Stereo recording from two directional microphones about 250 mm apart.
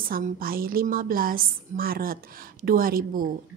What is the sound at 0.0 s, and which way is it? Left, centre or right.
A woman's voice, right.